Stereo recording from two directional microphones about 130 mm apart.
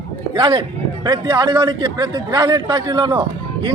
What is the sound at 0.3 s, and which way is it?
A man's voice, 40° right (ahead or behind).